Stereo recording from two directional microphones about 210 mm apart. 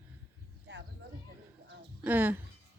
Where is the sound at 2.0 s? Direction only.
5° right (ahead or behind).